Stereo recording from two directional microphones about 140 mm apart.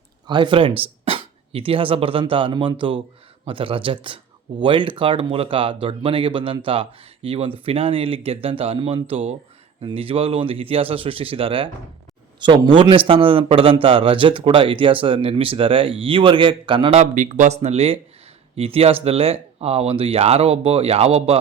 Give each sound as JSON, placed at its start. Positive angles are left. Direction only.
{"t": 0.3, "sound": "speech", "side_deg": -35}
{"t": 17.0, "sound": "speech", "side_deg": -60}